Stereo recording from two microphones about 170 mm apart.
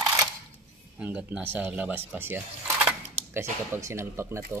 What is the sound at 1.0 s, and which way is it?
Speech, 10° right (ahead or behind).